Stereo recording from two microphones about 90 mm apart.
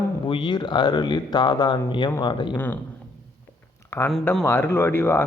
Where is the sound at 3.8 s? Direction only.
30° left (ahead or behind).